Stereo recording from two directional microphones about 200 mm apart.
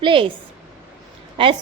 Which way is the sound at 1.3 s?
25° right (ahead or behind).